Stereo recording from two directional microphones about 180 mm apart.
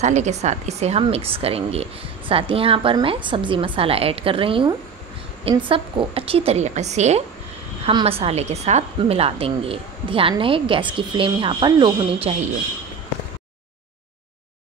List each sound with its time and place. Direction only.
0.0 s a woman's voice: 40° right (ahead or behind)